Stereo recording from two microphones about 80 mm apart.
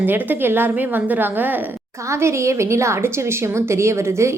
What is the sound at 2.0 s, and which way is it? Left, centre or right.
A woman's voice, right.